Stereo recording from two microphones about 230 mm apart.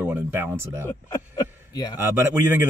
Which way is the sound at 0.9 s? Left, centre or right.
Centre.